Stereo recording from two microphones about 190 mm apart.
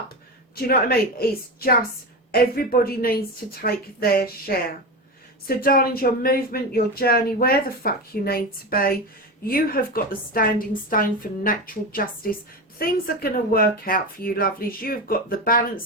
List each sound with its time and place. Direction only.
0.5 s speech: 50° left (ahead or behind)